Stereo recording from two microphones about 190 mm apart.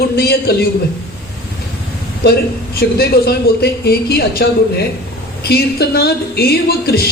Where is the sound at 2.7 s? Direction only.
55° left (ahead or behind).